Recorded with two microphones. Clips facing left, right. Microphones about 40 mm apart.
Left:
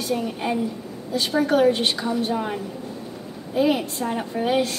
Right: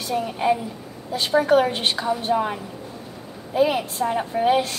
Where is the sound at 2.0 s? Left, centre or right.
Centre.